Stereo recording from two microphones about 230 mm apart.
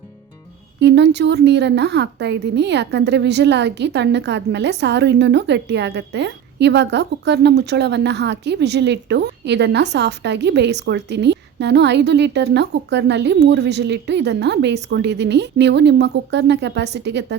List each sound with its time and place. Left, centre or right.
0.8 s a woman's voice: right